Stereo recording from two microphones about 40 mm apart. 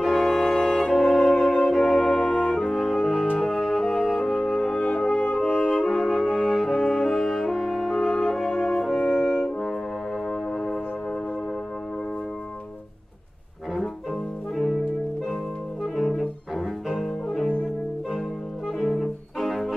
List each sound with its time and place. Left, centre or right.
0.0 s music: centre
2.2 s music: centre
4.8 s french horn: left
5.7 s music: centre
6.2 s brass instrument: centre
7.2 s music: centre
8.6 s french horn: centre
15.8 s music: centre
18.8 s music: centre